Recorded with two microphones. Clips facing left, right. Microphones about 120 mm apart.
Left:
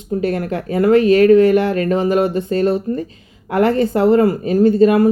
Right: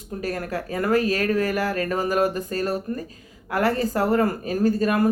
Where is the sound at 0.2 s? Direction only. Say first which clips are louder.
Left 6 dB; 25° left (ahead or behind).